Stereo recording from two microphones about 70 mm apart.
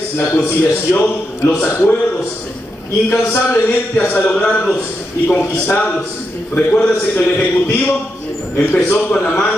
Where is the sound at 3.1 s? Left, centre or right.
Left.